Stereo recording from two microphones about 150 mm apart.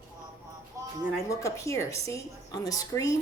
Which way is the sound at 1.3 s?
20° left (ahead or behind).